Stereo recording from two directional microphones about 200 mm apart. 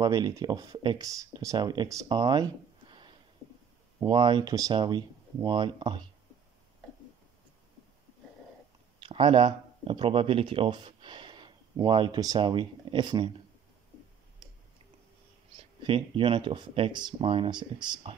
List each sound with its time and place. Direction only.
0.0 s speech: 20° right (ahead or behind)
9.0 s speech: 25° right (ahead or behind)
15.8 s speech: 25° right (ahead or behind)